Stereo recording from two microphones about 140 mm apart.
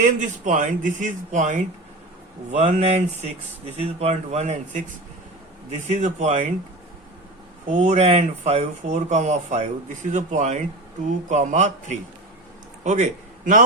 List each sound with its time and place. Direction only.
0.0 s speech: 60° right (ahead or behind)
5.9 s speech: 55° right (ahead or behind)
7.8 s a man's voice: 55° right (ahead or behind)